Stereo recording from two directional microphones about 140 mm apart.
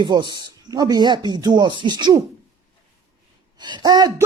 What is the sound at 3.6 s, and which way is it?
Speech, 30° right (ahead or behind).